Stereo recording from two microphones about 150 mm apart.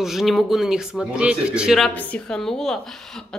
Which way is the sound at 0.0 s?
Centre (ahead or behind).